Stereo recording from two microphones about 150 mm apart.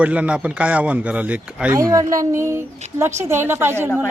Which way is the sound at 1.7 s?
20° right (ahead or behind).